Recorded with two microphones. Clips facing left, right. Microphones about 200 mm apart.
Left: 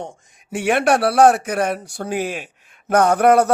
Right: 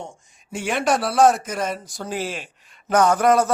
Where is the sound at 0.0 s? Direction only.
65° left (ahead or behind).